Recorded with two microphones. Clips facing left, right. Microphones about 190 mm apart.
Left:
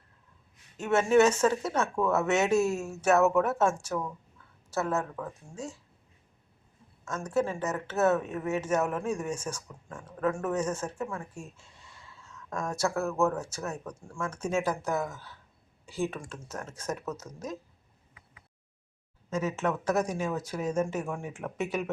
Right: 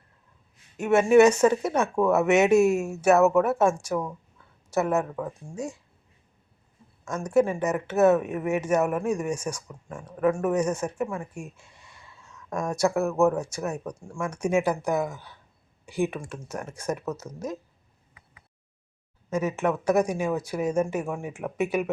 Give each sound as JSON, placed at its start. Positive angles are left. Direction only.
{"t": 0.8, "sound": "speech", "side_deg": -10}
{"t": 7.3, "sound": "speech", "side_deg": -15}
{"t": 19.3, "sound": "speech", "side_deg": -10}